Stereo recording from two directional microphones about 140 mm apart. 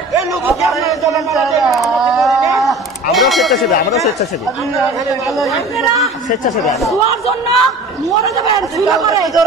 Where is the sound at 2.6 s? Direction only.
Centre (ahead or behind).